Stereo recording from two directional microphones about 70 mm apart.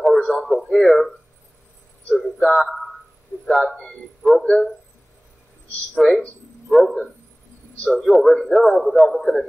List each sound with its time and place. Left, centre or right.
0.0 s a sound: centre
2.0 s a man's voice: centre
5.9 s a man's voice: centre